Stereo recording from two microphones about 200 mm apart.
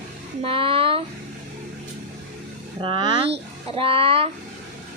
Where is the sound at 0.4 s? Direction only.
25° right (ahead or behind).